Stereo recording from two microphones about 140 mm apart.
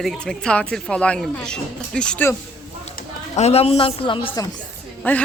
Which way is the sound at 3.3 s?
50° left (ahead or behind).